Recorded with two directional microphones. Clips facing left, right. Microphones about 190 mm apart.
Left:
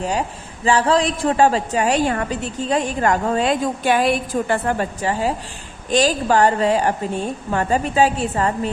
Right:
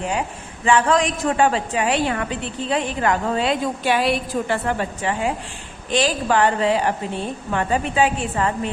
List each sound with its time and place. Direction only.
0.0 s a man's voice: 35° left (ahead or behind)